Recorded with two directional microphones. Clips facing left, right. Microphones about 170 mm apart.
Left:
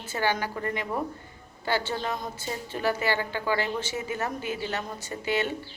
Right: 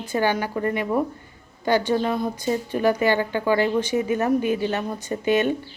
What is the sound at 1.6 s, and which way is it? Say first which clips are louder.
A woman's voice: right 8 dB; 15° right (ahead or behind).